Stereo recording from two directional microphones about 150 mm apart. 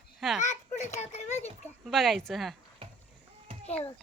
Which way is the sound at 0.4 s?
50° left (ahead or behind).